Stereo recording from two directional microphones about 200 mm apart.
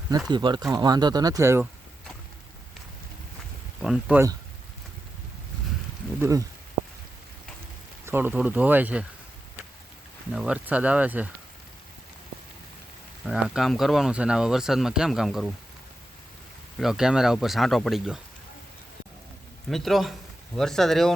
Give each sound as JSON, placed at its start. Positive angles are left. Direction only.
{"t": 0.3, "sound": "speech", "side_deg": -20}
{"t": 3.8, "sound": "speech", "side_deg": -5}
{"t": 6.1, "sound": "speech", "side_deg": -15}
{"t": 8.0, "sound": "speech", "side_deg": -10}
{"t": 10.3, "sound": "speech", "side_deg": -5}
{"t": 13.2, "sound": "speech", "side_deg": 0}
{"t": 16.7, "sound": "speech", "side_deg": 0}
{"t": 19.7, "sound": "speech", "side_deg": 0}